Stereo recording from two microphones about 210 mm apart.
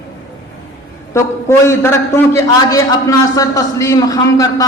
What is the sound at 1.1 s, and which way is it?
A man's voice, 15° left (ahead or behind).